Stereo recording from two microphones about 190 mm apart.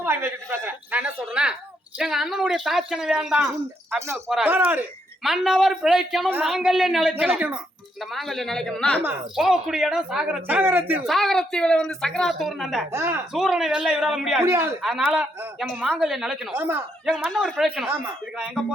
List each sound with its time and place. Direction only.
0.0 s a woman's voice: 10° right (ahead or behind)
11.1 s speech: centre (ahead or behind)
12.9 s a woman's voice: 15° right (ahead or behind)
13.3 s speech: centre (ahead or behind)
14.4 s a woman's voice: 15° right (ahead or behind)
14.8 s a woman's voice: centre (ahead or behind)